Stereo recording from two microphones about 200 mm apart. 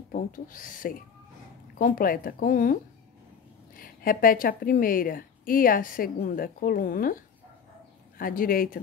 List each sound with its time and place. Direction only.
0.1 s a woman's voice: 40° left (ahead or behind)